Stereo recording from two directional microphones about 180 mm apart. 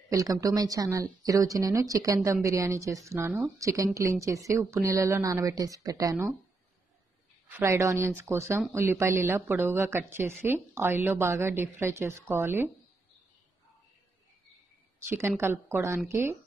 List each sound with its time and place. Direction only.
0.1 s a woman's voice: 20° right (ahead or behind)
7.5 s speech: 15° right (ahead or behind)
15.0 s speech: 15° right (ahead or behind)